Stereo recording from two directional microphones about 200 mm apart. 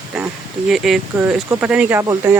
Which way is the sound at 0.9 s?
Centre (ahead or behind).